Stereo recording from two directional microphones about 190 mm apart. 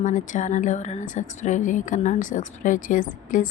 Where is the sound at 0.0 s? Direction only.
40° left (ahead or behind).